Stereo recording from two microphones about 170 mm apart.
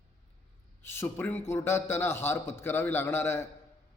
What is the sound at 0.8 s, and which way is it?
A man's voice, 15° left (ahead or behind).